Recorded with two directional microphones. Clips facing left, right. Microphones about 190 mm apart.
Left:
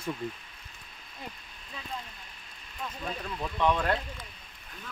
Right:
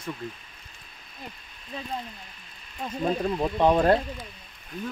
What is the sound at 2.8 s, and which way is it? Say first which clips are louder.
Speech: right 10 dB; 40° right (ahead or behind).